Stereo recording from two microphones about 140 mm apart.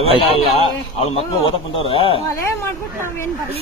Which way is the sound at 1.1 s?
40° left (ahead or behind).